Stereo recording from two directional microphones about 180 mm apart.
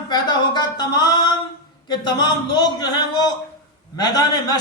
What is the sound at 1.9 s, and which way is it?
A man's voice, 25° left (ahead or behind).